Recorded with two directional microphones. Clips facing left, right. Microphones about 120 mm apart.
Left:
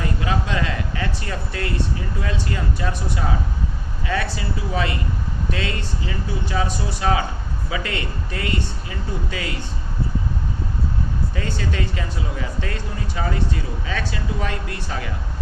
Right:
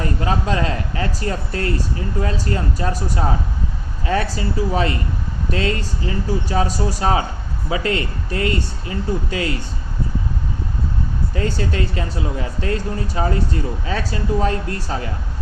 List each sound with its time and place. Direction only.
0.0 s speech: 40° right (ahead or behind)
11.3 s speech: 40° right (ahead or behind)